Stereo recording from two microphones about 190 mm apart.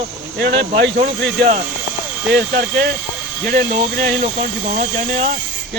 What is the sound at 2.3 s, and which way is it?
Speech, 60° right (ahead or behind).